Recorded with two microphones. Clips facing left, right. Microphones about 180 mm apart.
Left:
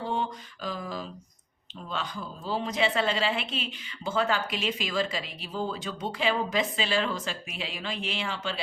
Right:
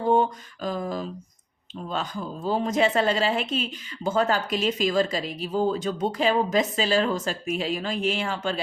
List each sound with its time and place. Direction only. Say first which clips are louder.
0.0 s mantra: right 9 dB; 45° right (ahead or behind)
1.9 s speech: right 4 dB; 45° right (ahead or behind)